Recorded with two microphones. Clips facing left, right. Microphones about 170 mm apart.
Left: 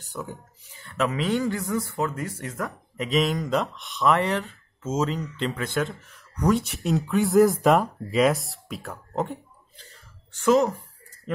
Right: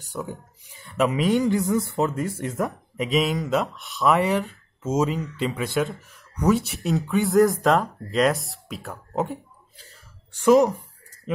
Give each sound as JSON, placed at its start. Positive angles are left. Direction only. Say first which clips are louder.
{"t": 0.7, "sound": "speech", "louder": "right 3 dB", "side_deg": -15}
{"t": 3.1, "sound": "a woman's voice", "louder": "right 1 dB", "side_deg": 0}